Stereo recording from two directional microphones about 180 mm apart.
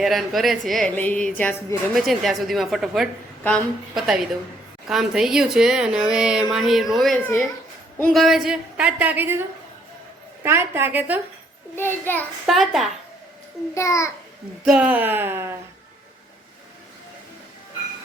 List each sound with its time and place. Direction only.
0.0 s a woman's voice: centre (ahead or behind)
10.4 s speech: 15° right (ahead or behind)
11.8 s a child's voice: 10° left (ahead or behind)
12.5 s a woman's voice: centre (ahead or behind)
13.7 s a child's voice: 15° left (ahead or behind)
14.6 s speech: 5° right (ahead or behind)